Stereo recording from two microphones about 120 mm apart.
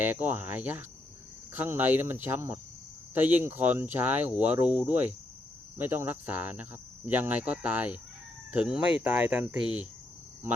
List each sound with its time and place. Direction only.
0.0 s speech: 15° right (ahead or behind)